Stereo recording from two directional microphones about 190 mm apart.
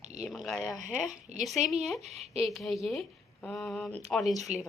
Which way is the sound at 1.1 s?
40° right (ahead or behind).